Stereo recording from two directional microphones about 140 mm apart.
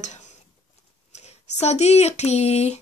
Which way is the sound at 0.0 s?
60° left (ahead or behind).